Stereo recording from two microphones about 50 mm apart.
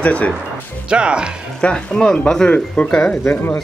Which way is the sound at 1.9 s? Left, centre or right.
Centre.